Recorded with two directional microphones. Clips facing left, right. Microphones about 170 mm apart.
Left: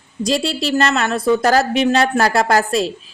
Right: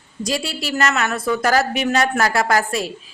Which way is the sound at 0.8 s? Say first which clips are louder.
Left 1 dB; 30° left (ahead or behind).